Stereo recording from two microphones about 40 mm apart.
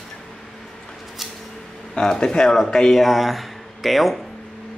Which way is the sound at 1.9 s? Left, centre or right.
Centre.